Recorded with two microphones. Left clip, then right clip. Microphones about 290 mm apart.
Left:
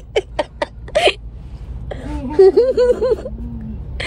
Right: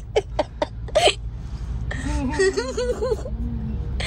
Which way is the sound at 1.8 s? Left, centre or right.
Centre.